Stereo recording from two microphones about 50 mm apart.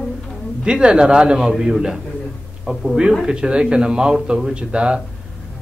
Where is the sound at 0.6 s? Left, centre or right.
Centre.